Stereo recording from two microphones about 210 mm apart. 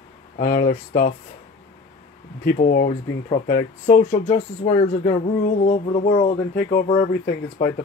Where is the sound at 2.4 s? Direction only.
45° left (ahead or behind).